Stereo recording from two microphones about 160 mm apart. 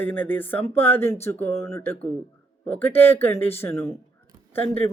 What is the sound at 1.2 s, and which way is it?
A woman's voice, 15° left (ahead or behind).